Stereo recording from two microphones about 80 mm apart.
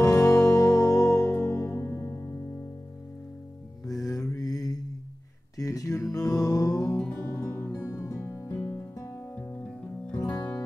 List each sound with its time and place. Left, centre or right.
0.0 s music: left
4.1 s mantra: left
5.6 s a sound: left
6.1 s music: left
7.9 s music: left; by 10.1 s centre